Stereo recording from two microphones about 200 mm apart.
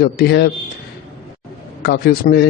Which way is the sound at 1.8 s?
50° left (ahead or behind).